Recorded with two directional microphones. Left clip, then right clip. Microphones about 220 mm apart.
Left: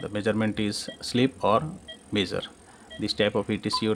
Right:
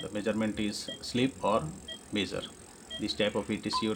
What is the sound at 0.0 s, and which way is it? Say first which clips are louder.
Speech: left 5 dB; 40° left (ahead or behind).